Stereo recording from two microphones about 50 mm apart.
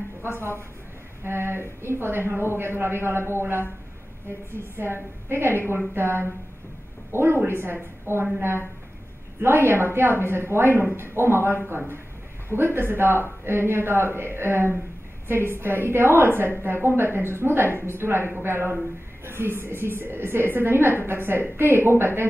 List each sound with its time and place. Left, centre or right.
1.2 s speech: right
4.5 s speech: right
9.4 s speech: right